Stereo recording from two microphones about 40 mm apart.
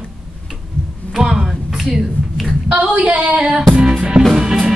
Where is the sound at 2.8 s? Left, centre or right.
Right.